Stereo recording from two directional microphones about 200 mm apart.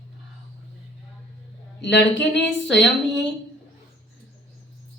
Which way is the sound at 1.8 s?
65° left (ahead or behind).